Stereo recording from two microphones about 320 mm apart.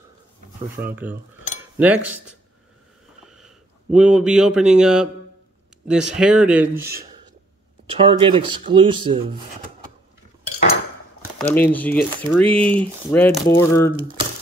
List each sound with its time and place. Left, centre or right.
1.8 s speech: centre
3.3 s speech: centre
7.9 s speech: centre
11.3 s speech: centre